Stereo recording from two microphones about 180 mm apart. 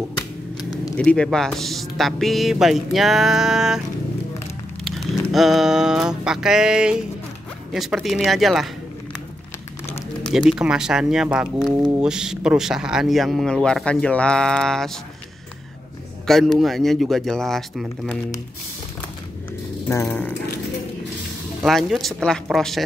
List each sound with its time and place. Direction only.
0.6 s a sound: 20° left (ahead or behind)
0.9 s speech: 5° left (ahead or behind)
4.8 s a sound: centre (ahead or behind)
7.7 s speech: centre (ahead or behind)
10.2 s speech: 5° right (ahead or behind)
16.3 s speech: centre (ahead or behind)
19.9 s speech: 15° left (ahead or behind)
21.6 s speech: centre (ahead or behind)